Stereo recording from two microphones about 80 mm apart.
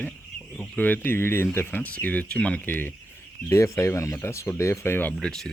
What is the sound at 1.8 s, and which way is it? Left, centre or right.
Speech, centre.